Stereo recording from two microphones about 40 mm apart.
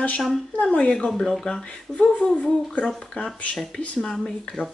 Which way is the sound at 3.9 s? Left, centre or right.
Centre.